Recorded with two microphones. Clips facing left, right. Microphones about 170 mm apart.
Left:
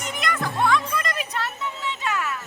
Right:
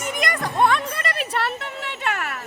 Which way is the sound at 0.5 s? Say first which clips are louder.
Right 3 dB; 60° right (ahead or behind).